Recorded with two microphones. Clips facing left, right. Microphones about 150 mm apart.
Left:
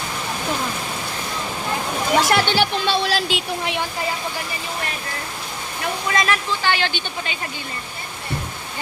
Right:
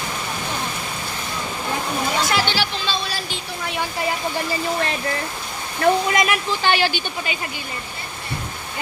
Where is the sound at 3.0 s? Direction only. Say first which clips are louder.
Left 7 dB; 90° left.